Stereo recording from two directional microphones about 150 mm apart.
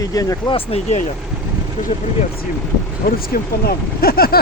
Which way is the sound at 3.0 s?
90° left.